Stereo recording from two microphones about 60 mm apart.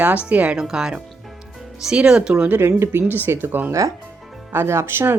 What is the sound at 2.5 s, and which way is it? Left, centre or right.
A woman's voice, right.